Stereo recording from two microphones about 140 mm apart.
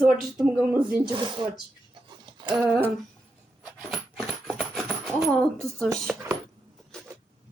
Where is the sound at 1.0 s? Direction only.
35° right (ahead or behind).